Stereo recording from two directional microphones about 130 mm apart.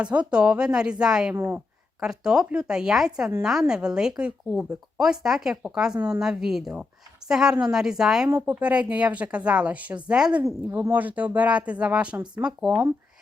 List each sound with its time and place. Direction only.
0.0 s speech: 10° right (ahead or behind)
1.4 s speech: 15° right (ahead or behind)
2.0 s speech: 5° right (ahead or behind)
10.4 s speech: 20° right (ahead or behind)